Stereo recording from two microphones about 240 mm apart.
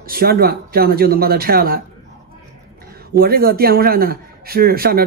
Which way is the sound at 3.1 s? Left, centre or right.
Right.